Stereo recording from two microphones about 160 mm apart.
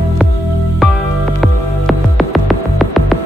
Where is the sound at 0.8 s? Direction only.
Centre (ahead or behind).